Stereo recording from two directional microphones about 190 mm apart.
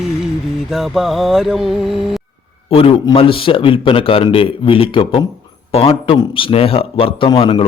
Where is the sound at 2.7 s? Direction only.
30° left (ahead or behind).